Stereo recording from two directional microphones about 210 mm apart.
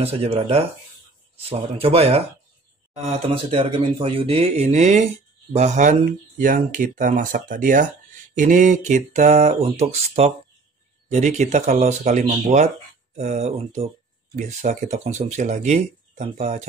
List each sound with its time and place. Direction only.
0.0 s speech: 30° right (ahead or behind)